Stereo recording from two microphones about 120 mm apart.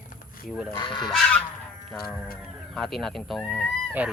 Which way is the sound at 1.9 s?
5° left (ahead or behind).